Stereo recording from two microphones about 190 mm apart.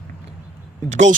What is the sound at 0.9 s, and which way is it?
Speech, 40° right (ahead or behind).